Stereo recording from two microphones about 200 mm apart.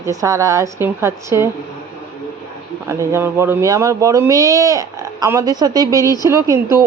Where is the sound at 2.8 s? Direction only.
15° right (ahead or behind).